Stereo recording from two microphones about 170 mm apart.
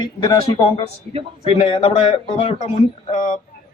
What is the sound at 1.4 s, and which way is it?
Speech, 35° left (ahead or behind).